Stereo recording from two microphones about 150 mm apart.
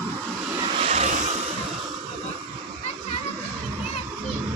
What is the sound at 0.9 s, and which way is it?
Vehicle, 50° right (ahead or behind).